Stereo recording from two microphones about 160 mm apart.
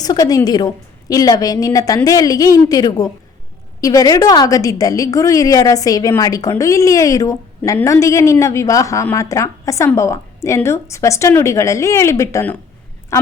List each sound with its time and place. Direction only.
0.0 s a woman's voice: 25° left (ahead or behind)